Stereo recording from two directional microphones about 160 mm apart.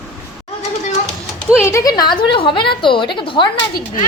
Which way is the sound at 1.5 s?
15° left (ahead or behind).